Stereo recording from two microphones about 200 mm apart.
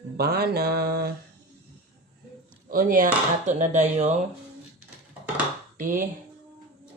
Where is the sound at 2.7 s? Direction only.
45° right (ahead or behind).